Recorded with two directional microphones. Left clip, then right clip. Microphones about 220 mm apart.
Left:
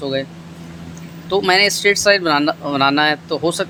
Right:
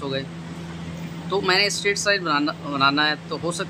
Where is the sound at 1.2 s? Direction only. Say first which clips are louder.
Left 6 dB; 25° left (ahead or behind).